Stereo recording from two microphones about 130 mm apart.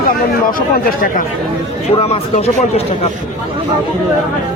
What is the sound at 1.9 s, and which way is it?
Speech, 50° left (ahead or behind).